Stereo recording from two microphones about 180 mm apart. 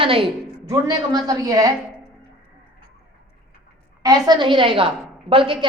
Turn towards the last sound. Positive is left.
turn(degrees=-30)  # may be behind; listen again after turning